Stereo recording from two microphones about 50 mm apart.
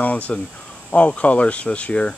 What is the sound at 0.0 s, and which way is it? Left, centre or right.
Speech, left.